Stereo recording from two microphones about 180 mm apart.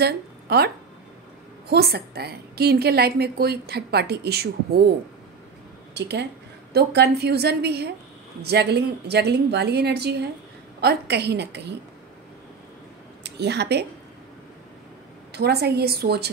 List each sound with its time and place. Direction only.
0.0 s speech: 65° right (ahead or behind)
1.7 s a woman's voice: 60° right (ahead or behind)
5.9 s a woman's voice: 70° right (ahead or behind)
13.2 s speech: 70° right (ahead or behind)
15.3 s a woman's voice: 65° right (ahead or behind)